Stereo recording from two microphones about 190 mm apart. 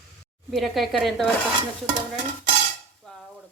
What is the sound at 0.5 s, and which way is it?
Speech, centre (ahead or behind).